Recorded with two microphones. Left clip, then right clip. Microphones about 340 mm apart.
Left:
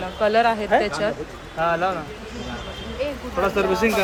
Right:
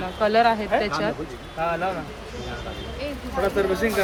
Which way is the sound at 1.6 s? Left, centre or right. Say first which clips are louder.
Left 4 dB; left.